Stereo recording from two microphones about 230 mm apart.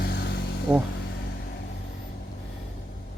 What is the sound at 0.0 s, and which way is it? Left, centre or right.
Vehicle, left.